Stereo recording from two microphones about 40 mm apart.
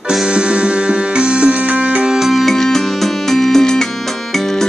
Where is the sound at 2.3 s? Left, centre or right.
Centre.